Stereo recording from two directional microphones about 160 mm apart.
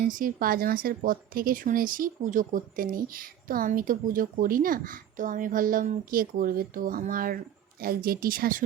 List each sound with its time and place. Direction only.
0.0 s a woman's voice: 60° right (ahead or behind)